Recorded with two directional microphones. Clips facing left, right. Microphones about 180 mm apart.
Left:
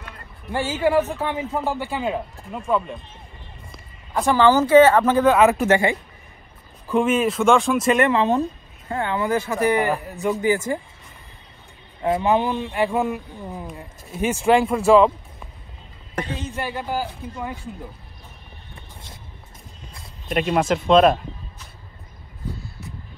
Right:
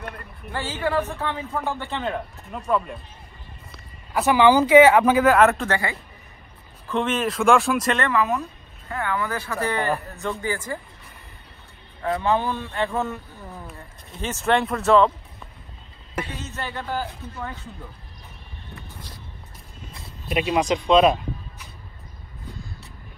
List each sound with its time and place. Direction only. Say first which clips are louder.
0.5 s a man's voice: left 5 dB; 15° left (ahead or behind); by 5.5 s 5° right (ahead or behind)
5.5 s speech: left 6 dB; 15° left (ahead or behind)
6.9 s speech: left 5 dB; 10° left (ahead or behind)
8.1 s speech: left 4 dB; 30° left (ahead or behind)
12.0 s a man's voice: left 3 dB; 20° left (ahead or behind)
16.3 s a man's voice: left 4 dB; 15° left (ahead or behind)
20.2 s speech: left 1 dB; 5° right (ahead or behind)